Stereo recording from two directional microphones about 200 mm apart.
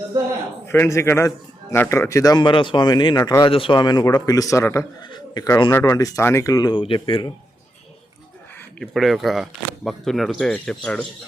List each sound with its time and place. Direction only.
0.7 s speech: 10° left (ahead or behind)
8.8 s speech: centre (ahead or behind)